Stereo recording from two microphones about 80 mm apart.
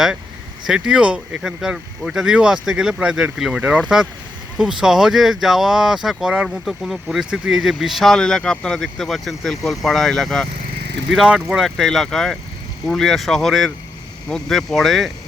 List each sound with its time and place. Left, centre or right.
0.7 s speech: centre
11.1 s speech: centre